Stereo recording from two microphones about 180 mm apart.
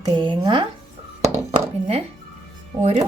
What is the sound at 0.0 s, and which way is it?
Speech, 25° right (ahead or behind).